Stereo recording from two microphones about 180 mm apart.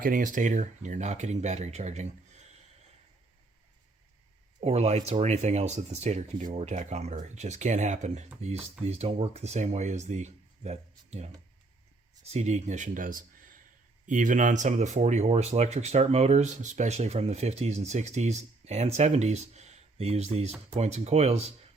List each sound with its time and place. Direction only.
0.0 s speech: 50° right (ahead or behind)
4.6 s speech: 35° right (ahead or behind)
12.3 s speech: 40° right (ahead or behind)